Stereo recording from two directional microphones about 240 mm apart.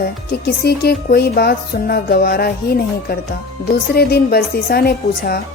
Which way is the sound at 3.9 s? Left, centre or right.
Left.